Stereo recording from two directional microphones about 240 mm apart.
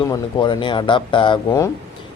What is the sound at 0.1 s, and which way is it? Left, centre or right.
Speech, centre.